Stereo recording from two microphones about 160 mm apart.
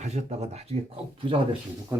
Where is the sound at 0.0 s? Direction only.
45° right (ahead or behind).